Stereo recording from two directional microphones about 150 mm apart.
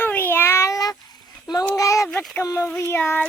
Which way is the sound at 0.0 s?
15° left (ahead or behind).